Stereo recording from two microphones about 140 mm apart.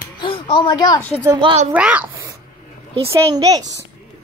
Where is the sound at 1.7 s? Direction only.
10° right (ahead or behind).